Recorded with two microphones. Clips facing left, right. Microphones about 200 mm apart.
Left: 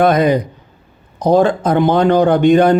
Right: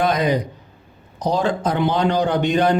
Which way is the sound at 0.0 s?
55° left (ahead or behind).